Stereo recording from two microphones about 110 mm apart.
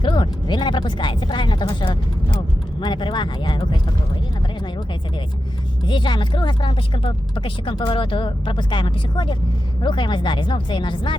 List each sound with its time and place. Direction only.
0.0 s speech: 45° left (ahead or behind)
5.9 s speech: 45° left (ahead or behind)